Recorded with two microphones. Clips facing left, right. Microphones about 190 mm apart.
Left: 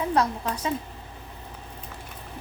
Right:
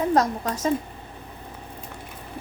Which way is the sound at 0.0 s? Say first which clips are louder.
Right 3 dB; 40° right (ahead or behind).